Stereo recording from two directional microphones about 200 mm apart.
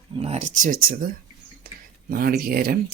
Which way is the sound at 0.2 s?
35° right (ahead or behind).